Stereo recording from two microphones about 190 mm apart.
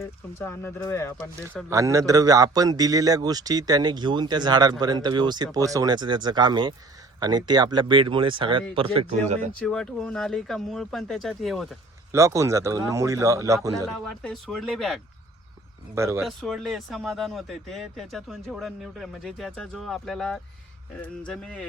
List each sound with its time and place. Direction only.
0.3 s speech: 10° left (ahead or behind)
1.7 s a man's voice: 15° right (ahead or behind); by 9.5 s 35° right (ahead or behind)
9.6 s speech: 5° left (ahead or behind)
12.1 s speech: 15° right (ahead or behind)
14.0 s speech: 5° left (ahead or behind)
16.0 s speech: 15° right (ahead or behind)
16.2 s speech: centre (ahead or behind)